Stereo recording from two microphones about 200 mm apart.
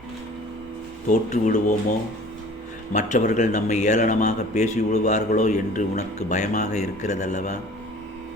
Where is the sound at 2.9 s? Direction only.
35° left (ahead or behind).